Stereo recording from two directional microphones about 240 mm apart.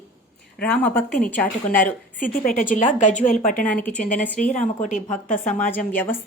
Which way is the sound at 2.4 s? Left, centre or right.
Left.